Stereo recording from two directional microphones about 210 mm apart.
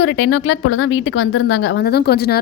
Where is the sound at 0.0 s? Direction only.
65° left (ahead or behind).